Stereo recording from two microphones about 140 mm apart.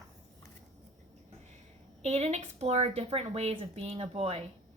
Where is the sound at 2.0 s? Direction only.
50° right (ahead or behind).